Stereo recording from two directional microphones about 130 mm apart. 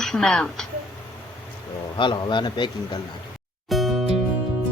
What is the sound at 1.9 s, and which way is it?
A man's voice, 40° left (ahead or behind).